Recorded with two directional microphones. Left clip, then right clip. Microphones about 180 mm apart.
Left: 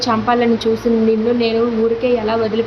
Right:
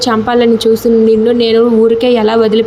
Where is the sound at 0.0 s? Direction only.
30° right (ahead or behind).